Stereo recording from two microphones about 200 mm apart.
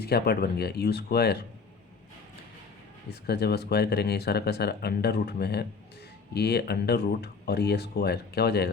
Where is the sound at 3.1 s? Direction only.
55° left (ahead or behind).